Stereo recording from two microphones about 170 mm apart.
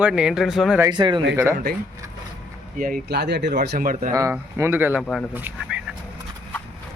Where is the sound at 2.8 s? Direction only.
65° right (ahead or behind); by 3.5 s 80° right.